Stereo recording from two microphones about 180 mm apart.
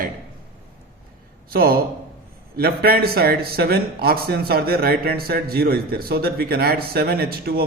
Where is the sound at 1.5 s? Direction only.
55° right (ahead or behind).